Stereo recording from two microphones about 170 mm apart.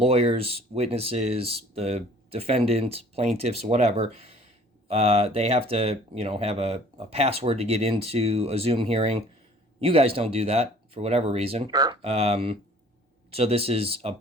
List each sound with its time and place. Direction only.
0.0 s speech: 35° right (ahead or behind)
11.7 s speech: 25° right (ahead or behind)
12.0 s speech: 40° right (ahead or behind)